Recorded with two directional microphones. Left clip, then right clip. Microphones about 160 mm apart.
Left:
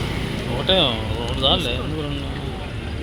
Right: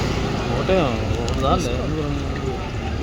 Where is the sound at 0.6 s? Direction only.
Centre (ahead or behind).